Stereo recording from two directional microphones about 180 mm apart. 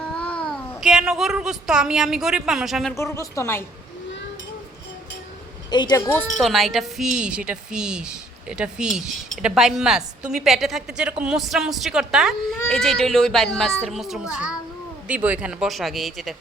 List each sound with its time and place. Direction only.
0.0 s a child's voice: 5° left (ahead or behind)
2.9 s speech: 15° left (ahead or behind)
5.7 s a woman's voice: 25° left (ahead or behind)
6.4 s a woman's voice: centre (ahead or behind)